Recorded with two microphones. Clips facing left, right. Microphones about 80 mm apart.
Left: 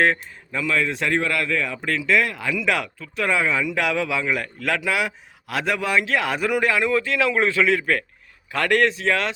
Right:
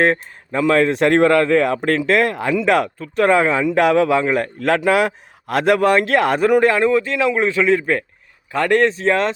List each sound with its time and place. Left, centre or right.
0.0 s speech: right
1.3 s speech: right
6.9 s speech: right